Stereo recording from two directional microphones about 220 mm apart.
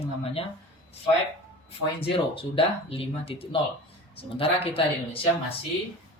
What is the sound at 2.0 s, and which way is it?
Speech, 25° left (ahead or behind).